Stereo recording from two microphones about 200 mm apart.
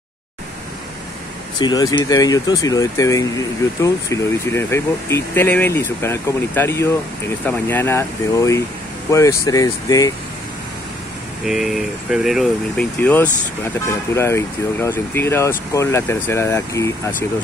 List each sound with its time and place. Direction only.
1.6 s speech: 20° left (ahead or behind)
11.4 s speech: centre (ahead or behind)